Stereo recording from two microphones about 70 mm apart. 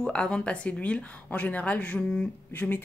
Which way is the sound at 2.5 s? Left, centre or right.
Left.